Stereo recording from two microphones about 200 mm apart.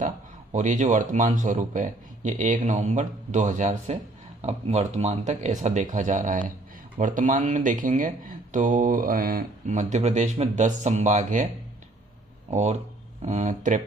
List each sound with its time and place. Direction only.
0.5 s speech: 40° right (ahead or behind)
12.5 s speech: 35° right (ahead or behind)